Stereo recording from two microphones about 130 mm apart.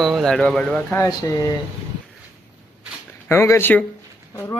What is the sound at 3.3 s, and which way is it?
Speech, 20° left (ahead or behind).